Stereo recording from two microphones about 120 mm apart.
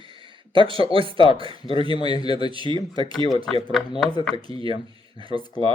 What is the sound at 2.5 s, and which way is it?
Speech, 45° right (ahead or behind).